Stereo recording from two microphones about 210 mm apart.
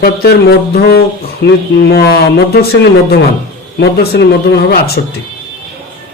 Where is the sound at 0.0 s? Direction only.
50° left (ahead or behind).